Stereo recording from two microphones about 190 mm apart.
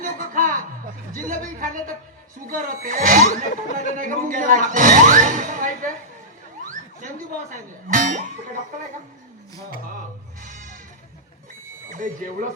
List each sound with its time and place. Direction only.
0.0 s a sound: 45° right (ahead or behind)
1.1 s speech: 45° right (ahead or behind)
3.2 s a sound: 40° left (ahead or behind)
3.9 s speech: 45° right (ahead or behind)
7.5 s speech: 45° right (ahead or behind)
10.4 s bleat: 45° right (ahead or behind)
11.9 s speech: 45° right (ahead or behind)